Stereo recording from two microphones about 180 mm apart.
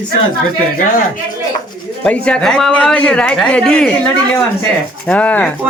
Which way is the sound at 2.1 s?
5° left (ahead or behind).